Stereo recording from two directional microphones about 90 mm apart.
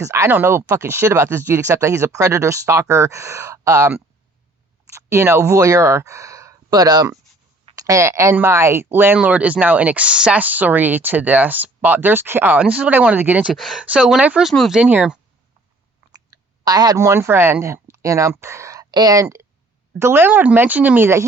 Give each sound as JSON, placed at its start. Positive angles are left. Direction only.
{"t": 0.0, "sound": "speech", "side_deg": -35}
{"t": 0.3, "sound": "speech", "side_deg": -25}
{"t": 7.8, "sound": "speech", "side_deg": -35}
{"t": 13.5, "sound": "speech", "side_deg": 0}
{"t": 13.8, "sound": "speech", "side_deg": -15}
{"t": 16.3, "sound": "a sound", "side_deg": -40}
{"t": 16.6, "sound": "speech", "side_deg": -45}
{"t": 18.9, "sound": "speech", "side_deg": -50}